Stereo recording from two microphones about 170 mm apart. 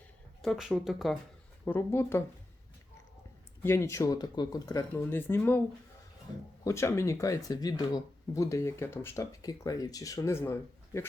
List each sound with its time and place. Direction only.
0.4 s speech: centre (ahead or behind)
1.6 s speech: 15° left (ahead or behind)
3.6 s speech: 15° left (ahead or behind)
6.7 s speech: 15° left (ahead or behind)